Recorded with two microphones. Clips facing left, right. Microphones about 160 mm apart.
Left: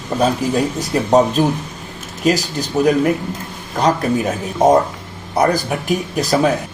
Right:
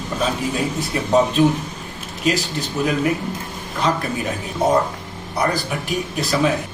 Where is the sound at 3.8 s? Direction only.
45° left (ahead or behind).